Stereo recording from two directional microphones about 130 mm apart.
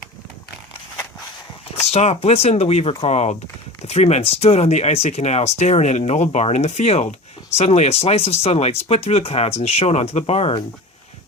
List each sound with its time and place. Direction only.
1.7 s speech: 55° left (ahead or behind)